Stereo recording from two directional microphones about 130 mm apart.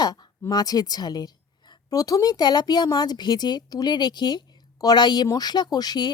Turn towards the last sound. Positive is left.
turn(degrees=30)  # may be behind; listen again after turning